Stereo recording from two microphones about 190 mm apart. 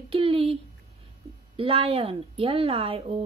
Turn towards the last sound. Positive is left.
turn(degrees=-30)  # may be behind; listen again after turning